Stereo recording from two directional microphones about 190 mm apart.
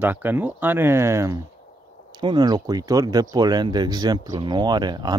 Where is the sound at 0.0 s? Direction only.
10° right (ahead or behind).